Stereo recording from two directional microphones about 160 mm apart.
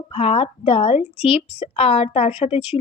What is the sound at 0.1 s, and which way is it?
Speech, 40° left (ahead or behind).